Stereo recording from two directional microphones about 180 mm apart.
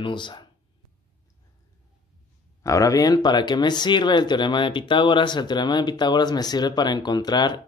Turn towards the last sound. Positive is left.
turn(degrees=25)  # may be behind; listen again after turning